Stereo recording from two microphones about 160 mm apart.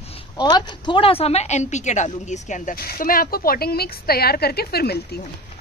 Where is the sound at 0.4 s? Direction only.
25° left (ahead or behind); by 5.2 s 75° left (ahead or behind).